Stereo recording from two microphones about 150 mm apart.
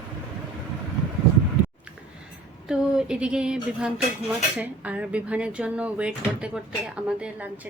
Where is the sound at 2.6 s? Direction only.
5° right (ahead or behind).